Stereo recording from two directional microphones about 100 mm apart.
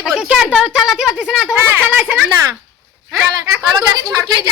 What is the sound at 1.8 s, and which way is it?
Speech, 15° right (ahead or behind).